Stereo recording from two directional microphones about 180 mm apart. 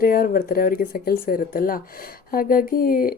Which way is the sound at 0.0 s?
55° left (ahead or behind).